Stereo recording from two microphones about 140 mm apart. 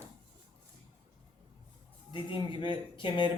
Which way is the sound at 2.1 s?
35° left (ahead or behind).